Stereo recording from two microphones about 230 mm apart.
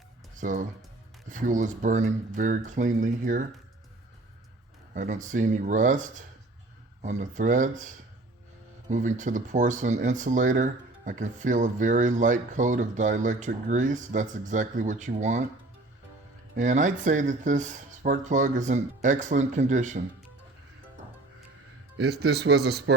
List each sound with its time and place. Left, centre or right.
0.3 s speech: right
4.9 s speech: right
16.6 s speech: right
21.9 s speech: right